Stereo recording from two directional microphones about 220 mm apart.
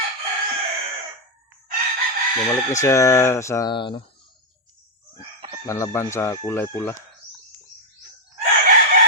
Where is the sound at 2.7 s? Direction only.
15° left (ahead or behind).